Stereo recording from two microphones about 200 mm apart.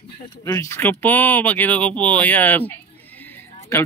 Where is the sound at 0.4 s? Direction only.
15° left (ahead or behind).